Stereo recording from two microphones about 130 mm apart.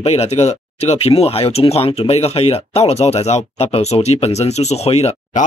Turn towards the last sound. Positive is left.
turn(degrees=55)  # may be behind; listen again after turning